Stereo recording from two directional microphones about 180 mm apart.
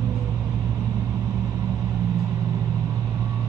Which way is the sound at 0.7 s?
10° right (ahead or behind).